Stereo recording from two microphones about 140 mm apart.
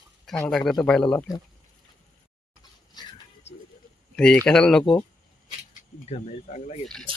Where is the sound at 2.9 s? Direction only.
30° left (ahead or behind).